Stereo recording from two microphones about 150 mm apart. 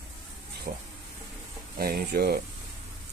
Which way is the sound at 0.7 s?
65° right (ahead or behind).